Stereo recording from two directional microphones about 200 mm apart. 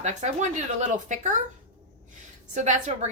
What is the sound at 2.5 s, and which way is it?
Speech, 35° right (ahead or behind).